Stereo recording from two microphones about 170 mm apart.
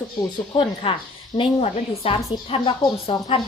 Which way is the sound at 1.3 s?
35° left (ahead or behind).